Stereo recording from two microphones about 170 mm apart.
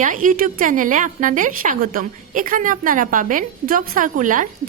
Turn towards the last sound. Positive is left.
turn(degrees=-50)  # may be behind; listen again after turning